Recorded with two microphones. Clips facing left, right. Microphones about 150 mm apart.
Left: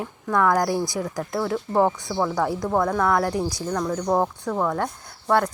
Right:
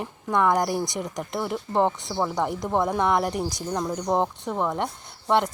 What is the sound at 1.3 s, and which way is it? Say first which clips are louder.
Speech: left 3 dB; 15° right (ahead or behind).